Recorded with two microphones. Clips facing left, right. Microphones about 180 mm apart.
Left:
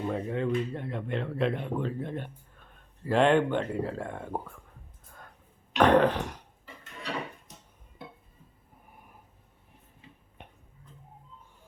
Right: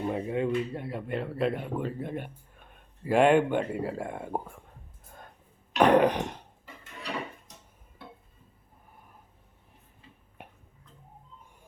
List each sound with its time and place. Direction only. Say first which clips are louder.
0.1 s speech: right 1 dB; 15° right (ahead or behind)
5.7 s a sound: right 1 dB; 10° right (ahead or behind)
10.4 s tick-tock: right 2 dB; 5° right (ahead or behind)